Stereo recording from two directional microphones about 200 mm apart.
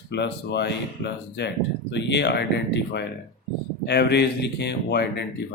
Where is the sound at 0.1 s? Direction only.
60° left (ahead or behind).